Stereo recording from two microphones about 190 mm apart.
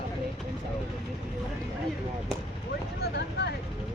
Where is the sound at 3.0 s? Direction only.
60° left (ahead or behind).